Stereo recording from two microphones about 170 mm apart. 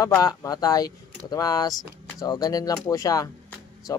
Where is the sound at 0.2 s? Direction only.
20° left (ahead or behind).